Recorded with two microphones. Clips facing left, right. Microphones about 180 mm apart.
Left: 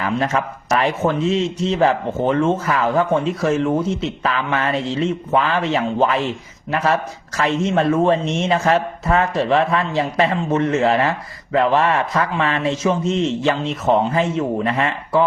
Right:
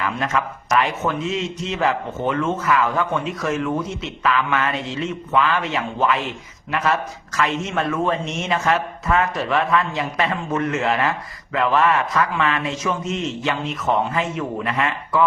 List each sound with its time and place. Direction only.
0.0 s a man's voice: 30° left (ahead or behind)